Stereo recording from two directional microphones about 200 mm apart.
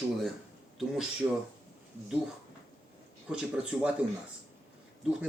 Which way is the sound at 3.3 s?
5° right (ahead or behind).